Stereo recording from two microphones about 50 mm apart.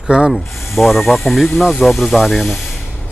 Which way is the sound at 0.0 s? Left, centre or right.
Centre.